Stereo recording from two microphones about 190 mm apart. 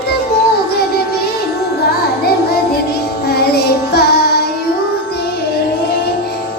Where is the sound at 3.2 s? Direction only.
55° left (ahead or behind).